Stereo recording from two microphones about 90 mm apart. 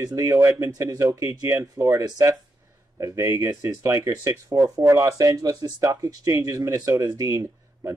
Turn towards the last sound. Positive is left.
turn(degrees=-35)  # may be behind; listen again after turning